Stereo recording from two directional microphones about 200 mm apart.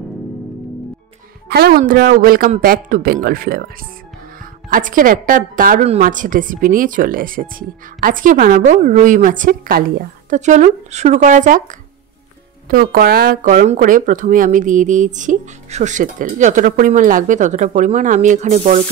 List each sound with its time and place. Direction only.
1.5 s a man's voice: 50° right (ahead or behind)
4.6 s a man's voice: 45° right (ahead or behind)